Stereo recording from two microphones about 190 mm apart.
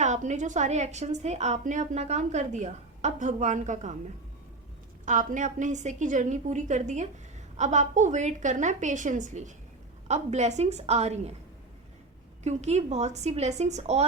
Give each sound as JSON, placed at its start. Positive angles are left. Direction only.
{"t": 0.0, "sound": "a woman's voice", "side_deg": -40}
{"t": 5.0, "sound": "a woman's voice", "side_deg": -40}
{"t": 12.4, "sound": "a woman's voice", "side_deg": -35}